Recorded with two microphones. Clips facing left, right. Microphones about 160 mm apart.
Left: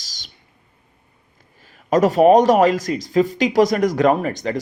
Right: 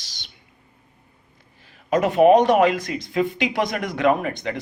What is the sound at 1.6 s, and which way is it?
Speech, 40° left (ahead or behind).